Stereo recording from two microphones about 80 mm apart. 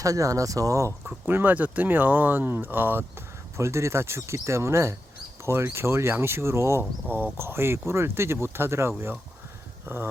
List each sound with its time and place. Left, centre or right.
0.0 s speech: right
1.0 s speech: right
3.6 s speech: right